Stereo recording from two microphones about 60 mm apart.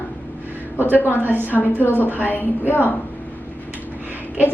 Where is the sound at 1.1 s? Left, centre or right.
Right.